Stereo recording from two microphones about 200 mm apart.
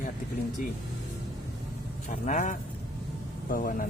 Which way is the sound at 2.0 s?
40° left (ahead or behind).